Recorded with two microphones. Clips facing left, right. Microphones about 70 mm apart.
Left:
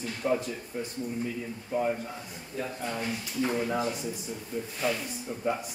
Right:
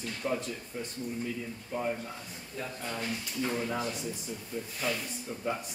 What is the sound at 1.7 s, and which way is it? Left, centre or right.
A man's voice, centre.